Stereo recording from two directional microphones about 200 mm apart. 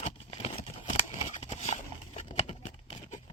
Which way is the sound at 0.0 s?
30° left (ahead or behind).